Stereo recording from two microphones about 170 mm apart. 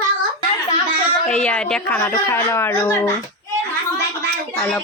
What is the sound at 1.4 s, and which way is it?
A woman's voice, 5° left (ahead or behind).